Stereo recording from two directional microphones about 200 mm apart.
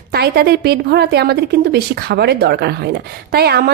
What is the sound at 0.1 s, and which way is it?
A woman's voice, 50° right (ahead or behind).